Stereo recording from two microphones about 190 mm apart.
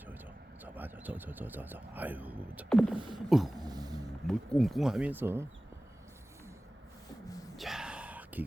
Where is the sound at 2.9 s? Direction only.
25° right (ahead or behind).